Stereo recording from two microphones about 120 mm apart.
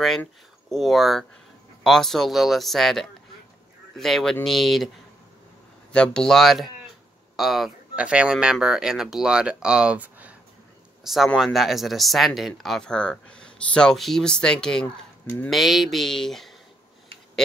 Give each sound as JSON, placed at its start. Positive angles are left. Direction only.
{"t": 0.7, "sound": "speech", "side_deg": 0}
{"t": 11.2, "sound": "speech", "side_deg": 0}
{"t": 15.2, "sound": "speech", "side_deg": 20}
{"t": 15.5, "sound": "speech", "side_deg": 0}